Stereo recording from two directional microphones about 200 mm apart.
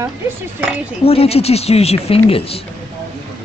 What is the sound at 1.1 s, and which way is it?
A woman's voice, 30° left (ahead or behind).